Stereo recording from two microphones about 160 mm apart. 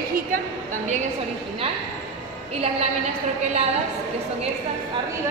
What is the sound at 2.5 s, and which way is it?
Speech, 40° right (ahead or behind).